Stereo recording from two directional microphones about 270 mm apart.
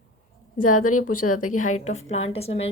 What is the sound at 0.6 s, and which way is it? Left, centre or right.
A woman's voice, left.